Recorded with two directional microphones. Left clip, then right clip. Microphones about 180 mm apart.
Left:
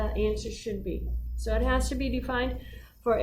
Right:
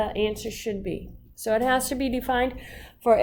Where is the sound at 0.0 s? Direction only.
40° right (ahead or behind).